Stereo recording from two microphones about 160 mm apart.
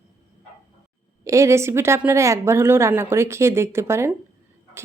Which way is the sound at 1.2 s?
20° right (ahead or behind).